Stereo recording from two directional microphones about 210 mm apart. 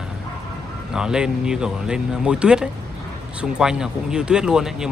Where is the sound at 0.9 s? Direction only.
5° right (ahead or behind).